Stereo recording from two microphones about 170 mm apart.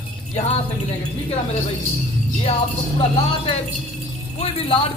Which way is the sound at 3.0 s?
35° left (ahead or behind).